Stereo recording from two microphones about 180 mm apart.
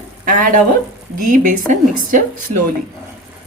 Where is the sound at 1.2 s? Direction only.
50° right (ahead or behind).